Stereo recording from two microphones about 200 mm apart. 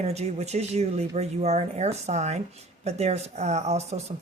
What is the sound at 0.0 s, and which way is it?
Speech, 30° right (ahead or behind).